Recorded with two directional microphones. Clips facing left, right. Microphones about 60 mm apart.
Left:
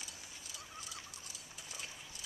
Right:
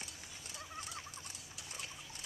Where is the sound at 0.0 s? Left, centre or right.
Right.